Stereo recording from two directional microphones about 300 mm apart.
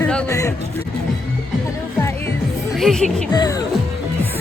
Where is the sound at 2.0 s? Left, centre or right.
Centre.